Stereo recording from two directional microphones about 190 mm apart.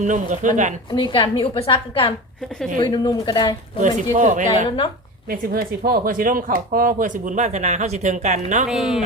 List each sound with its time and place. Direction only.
0.0 s speech: 40° right (ahead or behind)
0.9 s a woman's voice: 25° left (ahead or behind)
3.8 s a woman's voice: 40° right (ahead or behind)
5.3 s speech: 55° right (ahead or behind)
8.6 s speech: 5° right (ahead or behind)